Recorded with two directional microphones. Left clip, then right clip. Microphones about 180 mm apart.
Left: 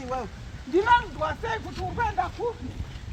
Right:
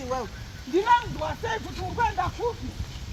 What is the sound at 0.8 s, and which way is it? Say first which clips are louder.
Speech: left 1 dB; centre (ahead or behind).